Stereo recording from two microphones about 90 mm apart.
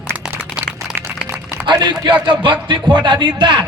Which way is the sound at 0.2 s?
10° right (ahead or behind).